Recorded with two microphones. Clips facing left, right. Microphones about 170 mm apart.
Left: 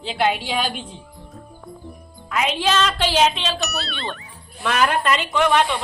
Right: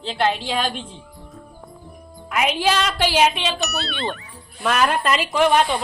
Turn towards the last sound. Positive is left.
turn(degrees=-35)  # may be behind; listen again after turning